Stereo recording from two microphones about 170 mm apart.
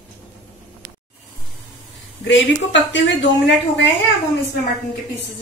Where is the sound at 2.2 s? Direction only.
90° left.